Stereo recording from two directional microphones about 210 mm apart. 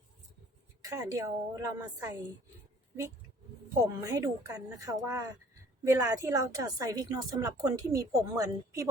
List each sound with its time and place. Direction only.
0.8 s a woman's voice: 15° right (ahead or behind)
4.0 s a woman's voice: 15° right (ahead or behind)